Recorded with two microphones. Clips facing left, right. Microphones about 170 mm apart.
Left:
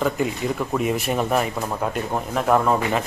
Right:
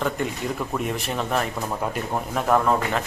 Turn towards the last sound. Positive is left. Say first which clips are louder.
# left 2 dB
turn(degrees=5)  # may be behind; listen again after turning